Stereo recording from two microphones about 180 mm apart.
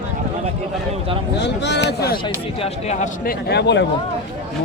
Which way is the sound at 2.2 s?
35° left (ahead or behind).